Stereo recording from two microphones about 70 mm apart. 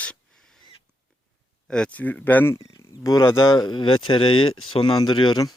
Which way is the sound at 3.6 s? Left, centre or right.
Left.